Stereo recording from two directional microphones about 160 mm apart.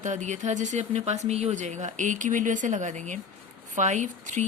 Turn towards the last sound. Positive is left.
turn(degrees=-50)  # may be behind; listen again after turning